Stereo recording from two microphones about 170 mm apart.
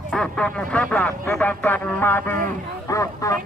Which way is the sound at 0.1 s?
5° left (ahead or behind).